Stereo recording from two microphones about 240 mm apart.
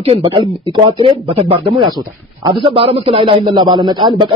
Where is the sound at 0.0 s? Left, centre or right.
Right.